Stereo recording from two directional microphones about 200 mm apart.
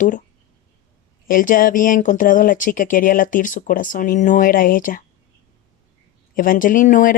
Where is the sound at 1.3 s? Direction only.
45° left (ahead or behind).